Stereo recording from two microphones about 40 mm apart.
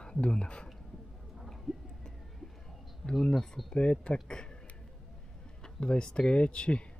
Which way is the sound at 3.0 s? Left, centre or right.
Centre.